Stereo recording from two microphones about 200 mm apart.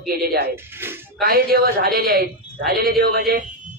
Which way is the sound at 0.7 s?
10° right (ahead or behind).